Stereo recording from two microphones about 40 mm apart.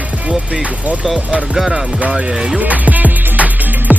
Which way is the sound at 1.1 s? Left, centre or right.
Centre.